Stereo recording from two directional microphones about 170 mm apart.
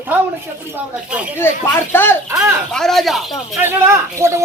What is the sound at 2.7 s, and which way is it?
Speech, centre (ahead or behind).